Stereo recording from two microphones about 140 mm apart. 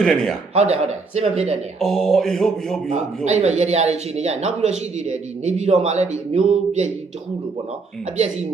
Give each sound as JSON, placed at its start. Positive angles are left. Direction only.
{"t": 0.0, "sound": "mantra", "side_deg": 0}
{"t": 0.5, "sound": "speech", "side_deg": -50}
{"t": 1.8, "sound": "mantra", "side_deg": 0}
{"t": 3.2, "sound": "speech", "side_deg": -55}